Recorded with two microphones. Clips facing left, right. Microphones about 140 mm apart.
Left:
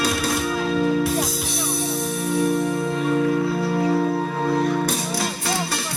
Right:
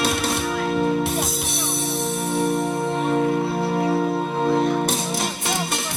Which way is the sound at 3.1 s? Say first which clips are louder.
Left 1 dB; 30° right (ahead or behind).